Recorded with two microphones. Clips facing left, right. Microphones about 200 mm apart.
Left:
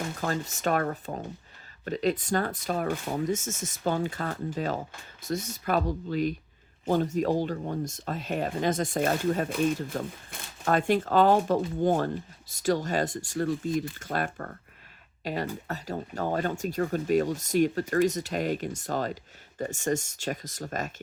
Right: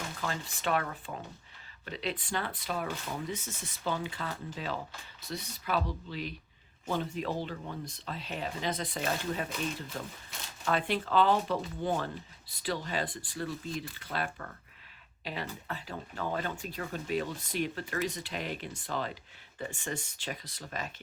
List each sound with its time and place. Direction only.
0.2 s speech: 45° left (ahead or behind)